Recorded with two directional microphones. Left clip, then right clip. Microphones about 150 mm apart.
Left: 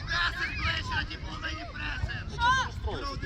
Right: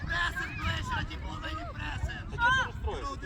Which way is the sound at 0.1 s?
90° right.